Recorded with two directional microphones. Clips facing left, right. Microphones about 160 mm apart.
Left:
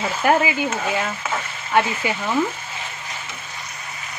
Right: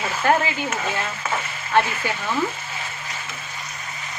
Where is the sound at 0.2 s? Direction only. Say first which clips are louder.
Left 2 dB; 10° left (ahead or behind).